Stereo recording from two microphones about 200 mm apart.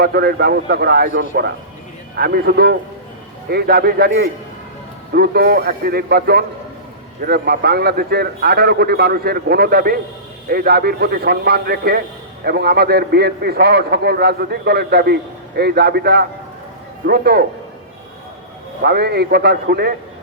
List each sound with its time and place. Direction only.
0.0 s a man's voice: 50° right (ahead or behind)
18.8 s a man's voice: 55° right (ahead or behind)